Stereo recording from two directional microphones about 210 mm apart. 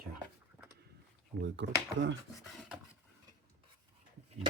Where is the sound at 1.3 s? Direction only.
55° right (ahead or behind).